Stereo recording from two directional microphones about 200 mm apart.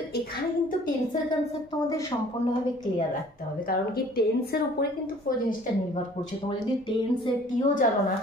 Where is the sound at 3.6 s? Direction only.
50° left (ahead or behind).